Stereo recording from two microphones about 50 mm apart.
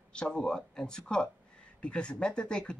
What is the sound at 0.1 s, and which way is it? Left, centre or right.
Speech, centre.